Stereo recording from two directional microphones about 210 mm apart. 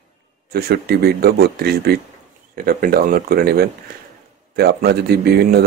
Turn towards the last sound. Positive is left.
turn(degrees=-50)  # may be behind; listen again after turning